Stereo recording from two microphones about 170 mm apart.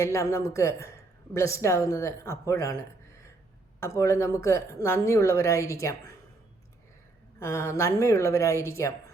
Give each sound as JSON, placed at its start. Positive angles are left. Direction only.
{"t": 0.0, "sound": "a woman's voice", "side_deg": 15}
{"t": 3.8, "sound": "a woman's voice", "side_deg": 15}
{"t": 7.3, "sound": "a woman's voice", "side_deg": 15}